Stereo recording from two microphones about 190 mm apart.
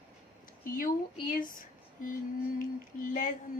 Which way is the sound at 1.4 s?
45° left (ahead or behind).